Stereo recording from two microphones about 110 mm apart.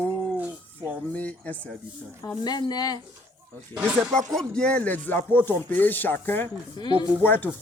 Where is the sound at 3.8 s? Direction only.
20° right (ahead or behind).